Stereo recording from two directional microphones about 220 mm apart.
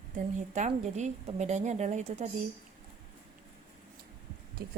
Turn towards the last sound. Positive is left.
turn(degrees=-45)  # may be behind; listen again after turning